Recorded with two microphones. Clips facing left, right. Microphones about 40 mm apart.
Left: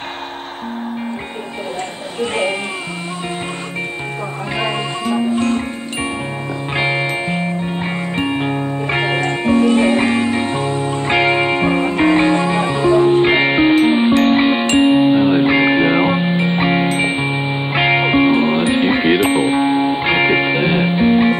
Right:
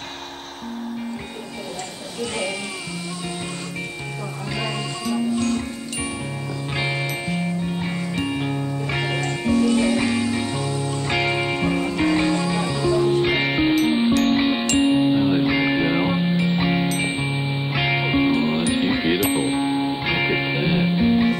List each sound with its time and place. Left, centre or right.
2.1 s speech: left
4.6 s music: left
6.8 s music: left